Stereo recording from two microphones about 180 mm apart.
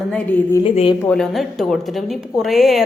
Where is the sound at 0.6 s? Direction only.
30° left (ahead or behind).